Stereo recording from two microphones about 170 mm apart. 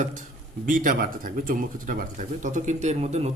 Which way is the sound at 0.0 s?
50° right (ahead or behind).